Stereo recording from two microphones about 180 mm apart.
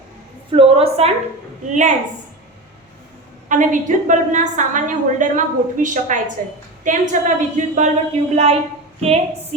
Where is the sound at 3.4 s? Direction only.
45° right (ahead or behind).